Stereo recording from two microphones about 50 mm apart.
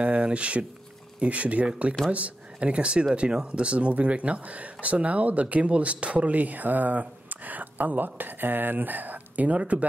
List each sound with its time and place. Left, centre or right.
0.0 s speech: right